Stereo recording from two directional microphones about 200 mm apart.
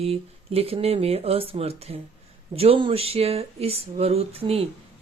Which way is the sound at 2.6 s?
25° right (ahead or behind).